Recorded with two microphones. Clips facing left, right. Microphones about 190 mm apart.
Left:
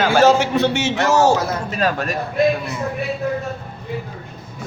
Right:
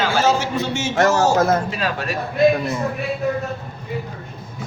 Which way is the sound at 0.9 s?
45° right (ahead or behind).